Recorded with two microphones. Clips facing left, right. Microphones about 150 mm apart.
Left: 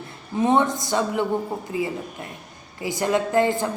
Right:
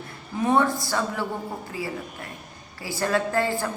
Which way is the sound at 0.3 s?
20° left (ahead or behind).